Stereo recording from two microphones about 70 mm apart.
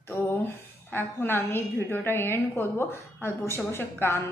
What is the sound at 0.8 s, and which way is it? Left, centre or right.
A woman's voice, left.